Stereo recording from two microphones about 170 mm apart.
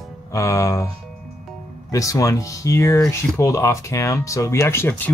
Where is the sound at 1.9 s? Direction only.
20° left (ahead or behind).